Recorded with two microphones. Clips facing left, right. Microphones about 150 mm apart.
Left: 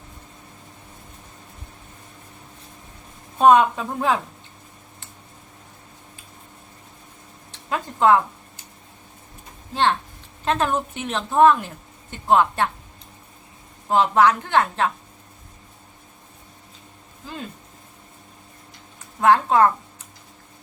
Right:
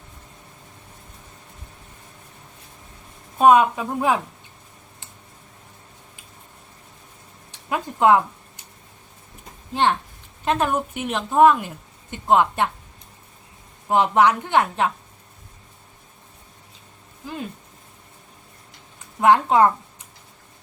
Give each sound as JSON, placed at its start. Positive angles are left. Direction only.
{"t": 3.3, "sound": "a woman's voice", "side_deg": -10}
{"t": 7.5, "sound": "speech", "side_deg": -15}
{"t": 9.7, "sound": "a woman's voice", "side_deg": -15}
{"t": 13.8, "sound": "a woman's voice", "side_deg": -15}
{"t": 19.2, "sound": "a woman's voice", "side_deg": -20}